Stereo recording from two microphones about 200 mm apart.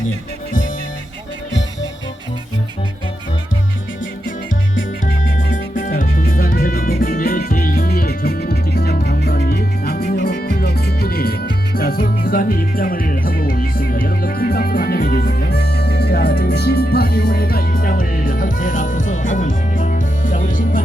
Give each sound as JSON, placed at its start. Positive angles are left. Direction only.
{"t": 5.0, "sound": "music", "side_deg": 40}